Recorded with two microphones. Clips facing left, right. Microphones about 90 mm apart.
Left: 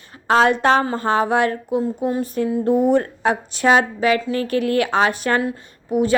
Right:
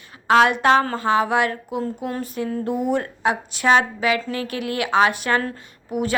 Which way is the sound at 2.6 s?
30° left (ahead or behind).